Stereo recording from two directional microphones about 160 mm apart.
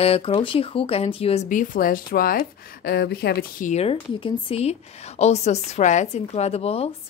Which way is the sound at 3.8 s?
35° left (ahead or behind).